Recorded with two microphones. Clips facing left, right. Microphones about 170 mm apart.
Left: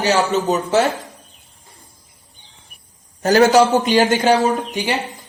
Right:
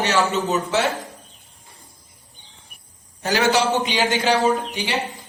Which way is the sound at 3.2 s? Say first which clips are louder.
Left 7 dB; 45° left (ahead or behind).